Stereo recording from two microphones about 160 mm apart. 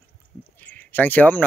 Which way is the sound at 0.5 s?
10° left (ahead or behind).